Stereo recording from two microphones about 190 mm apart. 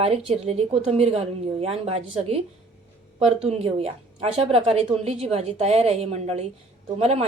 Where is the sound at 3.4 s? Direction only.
35° right (ahead or behind).